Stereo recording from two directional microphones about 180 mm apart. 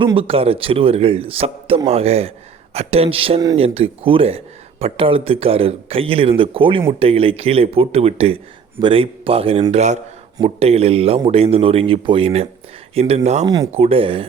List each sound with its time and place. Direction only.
0.0 s speech: 30° right (ahead or behind)
13.4 s speech: 20° right (ahead or behind)
13.7 s speech: 35° right (ahead or behind)